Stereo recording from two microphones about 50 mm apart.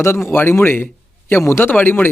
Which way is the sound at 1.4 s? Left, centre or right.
Left.